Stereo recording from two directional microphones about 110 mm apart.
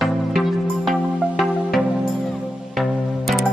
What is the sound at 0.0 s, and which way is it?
Music, centre (ahead or behind).